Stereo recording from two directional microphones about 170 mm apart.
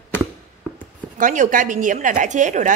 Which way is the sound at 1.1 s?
50° right (ahead or behind).